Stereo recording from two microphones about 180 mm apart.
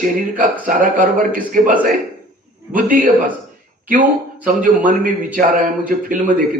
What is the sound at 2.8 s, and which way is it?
Speech, 50° right (ahead or behind).